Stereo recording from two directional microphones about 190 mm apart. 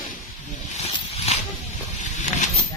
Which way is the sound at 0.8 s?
35° left (ahead or behind).